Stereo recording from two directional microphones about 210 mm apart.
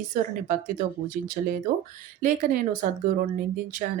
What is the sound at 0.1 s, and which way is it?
Speech, 40° right (ahead or behind).